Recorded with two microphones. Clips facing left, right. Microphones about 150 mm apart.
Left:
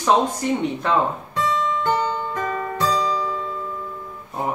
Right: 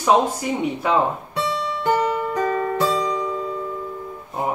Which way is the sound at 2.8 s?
25° right (ahead or behind).